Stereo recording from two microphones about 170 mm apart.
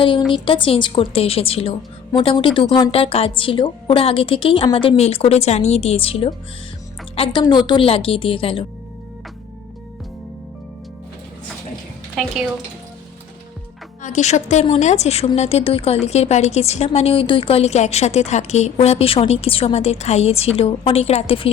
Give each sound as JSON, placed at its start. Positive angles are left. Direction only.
{"t": 0.2, "sound": "a woman's voice", "side_deg": 0}
{"t": 0.4, "sound": "a woman's voice", "side_deg": 30}
{"t": 14.0, "sound": "a woman's voice", "side_deg": 45}